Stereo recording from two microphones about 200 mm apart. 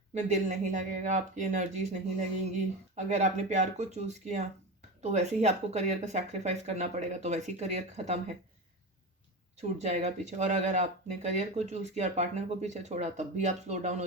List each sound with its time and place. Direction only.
0.1 s speech: 35° right (ahead or behind)
9.6 s speech: 35° right (ahead or behind)